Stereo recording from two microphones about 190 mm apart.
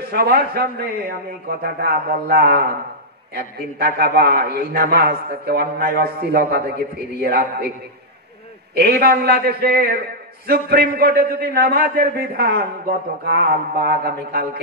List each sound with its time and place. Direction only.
0.0 s a man's voice: 55° right (ahead or behind)
8.7 s a man's voice: 55° right (ahead or behind)